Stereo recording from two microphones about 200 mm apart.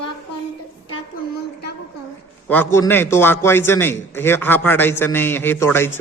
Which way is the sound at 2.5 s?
10° left (ahead or behind).